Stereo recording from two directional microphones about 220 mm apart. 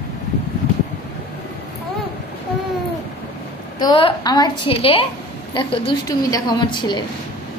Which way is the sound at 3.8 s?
20° left (ahead or behind).